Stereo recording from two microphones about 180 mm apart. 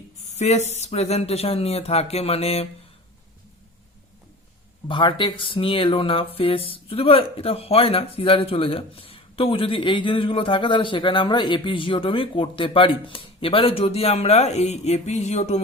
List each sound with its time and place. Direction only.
0.3 s speech: 40° left (ahead or behind)
4.9 s speech: 25° left (ahead or behind)